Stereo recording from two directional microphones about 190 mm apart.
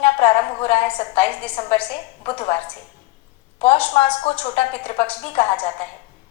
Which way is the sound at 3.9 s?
30° left (ahead or behind).